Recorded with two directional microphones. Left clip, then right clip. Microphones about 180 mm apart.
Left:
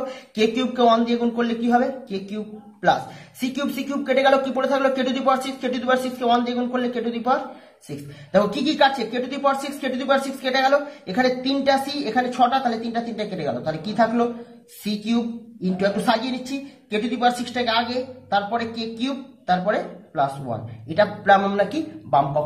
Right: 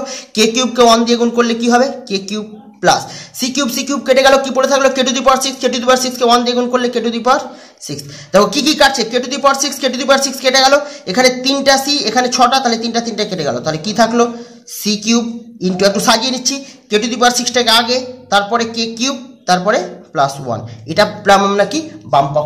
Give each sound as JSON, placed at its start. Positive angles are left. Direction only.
{"t": 0.3, "sound": "a man's voice", "side_deg": -40}
{"t": 15.6, "sound": "speech", "side_deg": -45}